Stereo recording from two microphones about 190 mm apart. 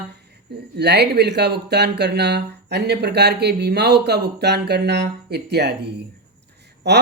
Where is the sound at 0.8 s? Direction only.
60° right (ahead or behind).